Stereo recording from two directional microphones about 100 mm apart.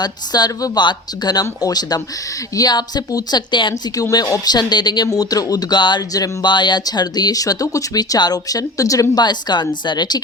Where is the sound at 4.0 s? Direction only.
40° left (ahead or behind).